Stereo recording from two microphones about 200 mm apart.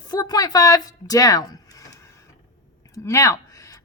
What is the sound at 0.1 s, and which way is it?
A woman's voice, 20° left (ahead or behind).